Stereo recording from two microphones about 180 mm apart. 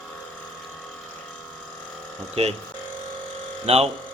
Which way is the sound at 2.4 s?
35° right (ahead or behind).